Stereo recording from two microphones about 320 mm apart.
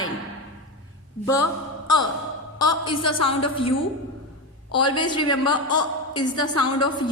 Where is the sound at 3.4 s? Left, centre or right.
Centre.